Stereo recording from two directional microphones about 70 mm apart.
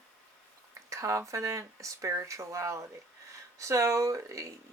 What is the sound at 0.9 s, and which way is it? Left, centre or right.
Speech, right.